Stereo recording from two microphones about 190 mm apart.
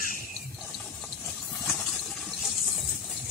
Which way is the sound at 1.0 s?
Centre (ahead or behind).